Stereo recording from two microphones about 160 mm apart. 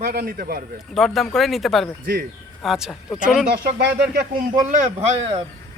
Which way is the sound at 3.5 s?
90° right.